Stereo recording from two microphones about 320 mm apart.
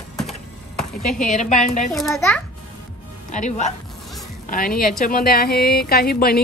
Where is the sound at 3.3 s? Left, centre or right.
Left.